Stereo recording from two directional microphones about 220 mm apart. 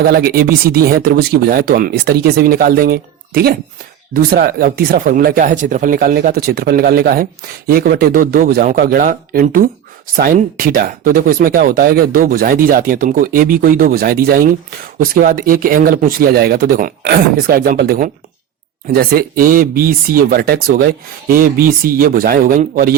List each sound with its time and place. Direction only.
0.0 s speech: 45° right (ahead or behind)